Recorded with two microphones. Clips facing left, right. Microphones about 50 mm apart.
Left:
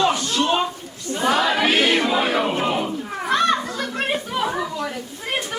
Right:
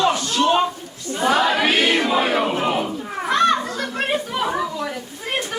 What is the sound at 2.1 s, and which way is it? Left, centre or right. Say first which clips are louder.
Music: right 1 dB; centre.